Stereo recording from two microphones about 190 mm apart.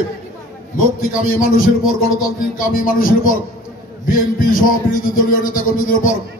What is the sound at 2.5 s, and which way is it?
A man's voice, 45° left (ahead or behind).